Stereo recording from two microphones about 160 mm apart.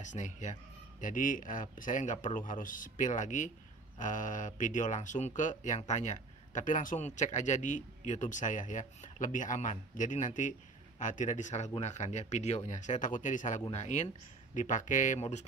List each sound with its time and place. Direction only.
0.0 s speech: 50° left (ahead or behind)